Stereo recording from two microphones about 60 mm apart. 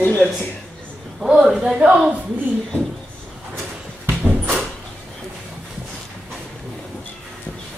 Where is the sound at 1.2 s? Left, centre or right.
Centre.